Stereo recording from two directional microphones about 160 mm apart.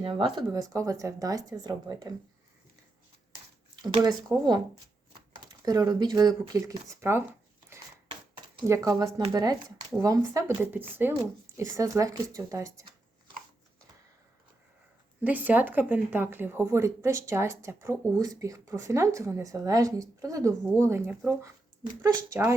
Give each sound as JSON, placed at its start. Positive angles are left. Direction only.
{"t": 0.0, "sound": "speech", "side_deg": -30}
{"t": 3.8, "sound": "speech", "side_deg": -25}
{"t": 8.6, "sound": "speech", "side_deg": -20}
{"t": 15.2, "sound": "speech", "side_deg": -10}